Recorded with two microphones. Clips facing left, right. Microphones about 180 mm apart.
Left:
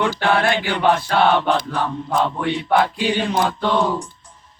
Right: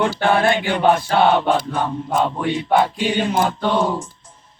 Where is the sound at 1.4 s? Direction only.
15° right (ahead or behind).